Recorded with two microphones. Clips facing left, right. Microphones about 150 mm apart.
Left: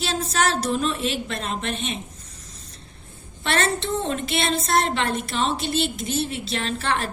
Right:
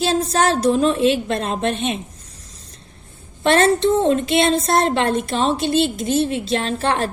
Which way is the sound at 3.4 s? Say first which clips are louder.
Right 9 dB; 45° right (ahead or behind).